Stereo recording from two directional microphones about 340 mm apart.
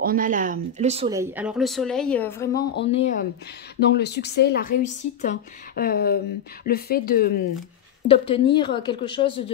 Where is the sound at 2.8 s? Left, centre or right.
Centre.